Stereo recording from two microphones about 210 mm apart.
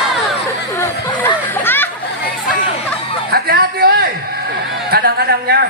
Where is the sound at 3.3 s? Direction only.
45° right (ahead or behind).